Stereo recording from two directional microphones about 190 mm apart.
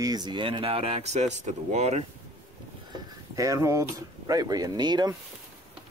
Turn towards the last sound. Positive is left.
turn(degrees=-20)  # may be behind; listen again after turning